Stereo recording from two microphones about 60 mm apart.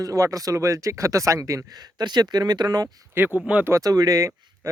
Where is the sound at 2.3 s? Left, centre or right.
Right.